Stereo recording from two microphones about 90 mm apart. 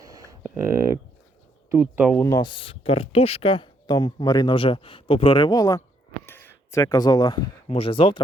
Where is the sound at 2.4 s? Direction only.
75° left (ahead or behind).